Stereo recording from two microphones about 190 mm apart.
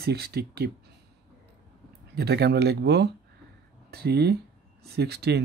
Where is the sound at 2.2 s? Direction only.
60° right (ahead or behind).